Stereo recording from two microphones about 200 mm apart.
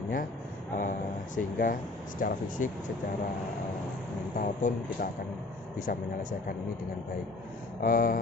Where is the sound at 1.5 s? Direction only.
40° left (ahead or behind).